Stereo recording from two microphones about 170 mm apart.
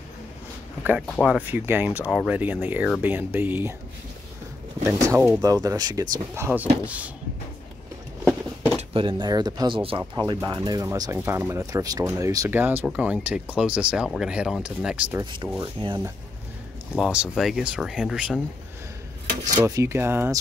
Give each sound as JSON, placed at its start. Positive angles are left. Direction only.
{"t": 0.8, "sound": "speech", "side_deg": 0}
{"t": 5.0, "sound": "speech", "side_deg": -15}
{"t": 8.9, "sound": "speech", "side_deg": -30}
{"t": 15.6, "sound": "speech", "side_deg": -30}
{"t": 16.9, "sound": "speech", "side_deg": -5}
{"t": 19.4, "sound": "speech", "side_deg": -20}